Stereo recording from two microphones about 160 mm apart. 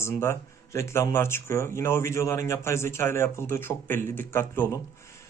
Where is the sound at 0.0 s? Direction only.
15° left (ahead or behind).